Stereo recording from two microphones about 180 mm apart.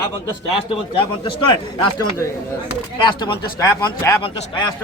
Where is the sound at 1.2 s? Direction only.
25° left (ahead or behind).